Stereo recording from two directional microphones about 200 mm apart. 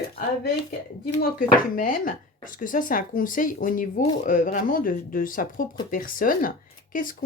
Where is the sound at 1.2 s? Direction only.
45° left (ahead or behind).